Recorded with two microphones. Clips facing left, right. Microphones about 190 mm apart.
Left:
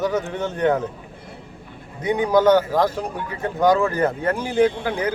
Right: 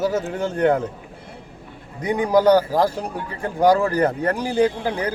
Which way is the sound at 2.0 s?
35° right (ahead or behind).